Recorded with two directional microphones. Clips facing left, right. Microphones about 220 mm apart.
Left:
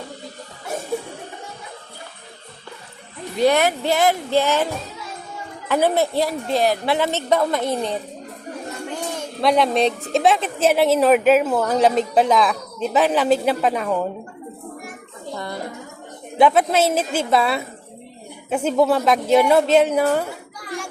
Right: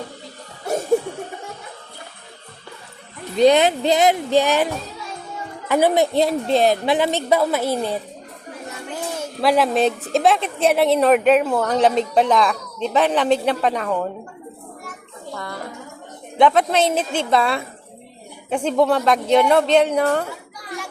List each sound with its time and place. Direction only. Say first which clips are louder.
3.3 s a woman's voice: right 3 dB; 20° right (ahead or behind)
9.0 s a woman's voice: right 1 dB; 5° right (ahead or behind)
16.4 s a woman's voice: even; 5° left (ahead or behind)